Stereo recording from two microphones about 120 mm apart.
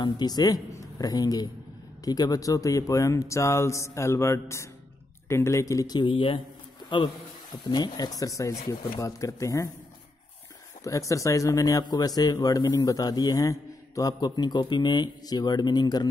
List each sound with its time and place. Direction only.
0.0 s a man's voice: 35° left (ahead or behind)
10.8 s speech: 25° left (ahead or behind)